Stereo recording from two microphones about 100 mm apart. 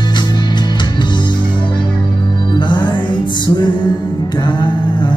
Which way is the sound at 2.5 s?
50° left (ahead or behind).